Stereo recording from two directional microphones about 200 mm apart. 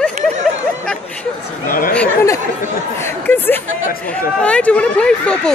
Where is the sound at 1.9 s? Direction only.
15° left (ahead or behind).